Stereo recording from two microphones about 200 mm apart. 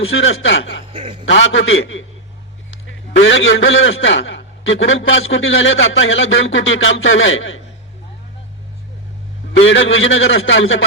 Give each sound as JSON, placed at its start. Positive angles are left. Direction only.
{"t": 0.0, "sound": "a man's voice", "side_deg": 85}
{"t": 0.9, "sound": "a man's voice", "side_deg": -30}
{"t": 1.2, "sound": "a man's voice", "side_deg": 70}
{"t": 9.5, "sound": "a man's voice", "side_deg": 70}